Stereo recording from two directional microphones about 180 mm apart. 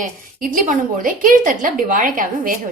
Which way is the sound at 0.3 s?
50° right (ahead or behind).